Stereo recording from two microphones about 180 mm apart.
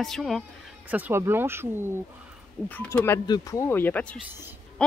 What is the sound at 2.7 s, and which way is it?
Speech, 10° left (ahead or behind).